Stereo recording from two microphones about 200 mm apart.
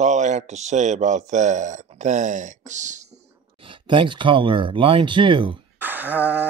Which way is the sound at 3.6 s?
25° right (ahead or behind).